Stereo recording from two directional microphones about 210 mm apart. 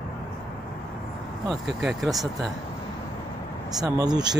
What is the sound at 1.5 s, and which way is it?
Speech, centre (ahead or behind).